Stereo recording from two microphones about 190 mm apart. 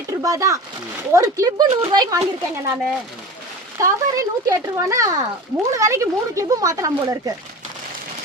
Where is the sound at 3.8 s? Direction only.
15° right (ahead or behind).